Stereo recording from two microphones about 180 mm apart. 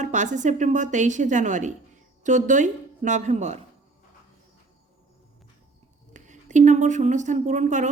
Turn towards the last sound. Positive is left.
turn(degrees=-45)  # may be behind; listen again after turning